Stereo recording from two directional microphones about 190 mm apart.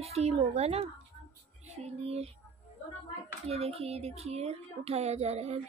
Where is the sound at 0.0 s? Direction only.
30° right (ahead or behind).